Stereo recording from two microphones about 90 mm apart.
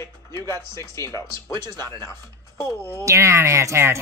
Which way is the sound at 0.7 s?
35° left (ahead or behind).